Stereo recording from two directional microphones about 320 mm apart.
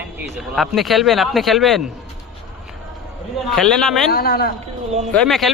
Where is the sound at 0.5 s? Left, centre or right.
Centre.